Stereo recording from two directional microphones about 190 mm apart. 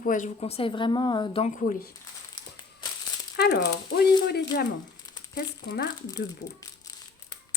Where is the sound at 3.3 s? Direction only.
60° left (ahead or behind).